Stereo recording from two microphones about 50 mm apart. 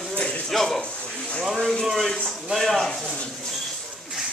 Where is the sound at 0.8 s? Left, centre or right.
Left.